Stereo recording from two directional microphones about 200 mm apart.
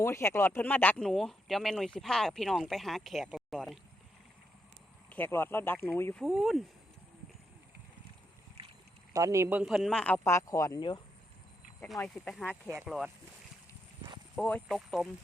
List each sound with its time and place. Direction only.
0.0 s speech: 15° left (ahead or behind)
5.0 s speech: 10° left (ahead or behind)
6.2 s speech: centre (ahead or behind)
9.1 s speech: 15° right (ahead or behind); by 11.0 s 20° left (ahead or behind)
11.8 s speech: 5° left (ahead or behind)
14.3 s speech: centre (ahead or behind)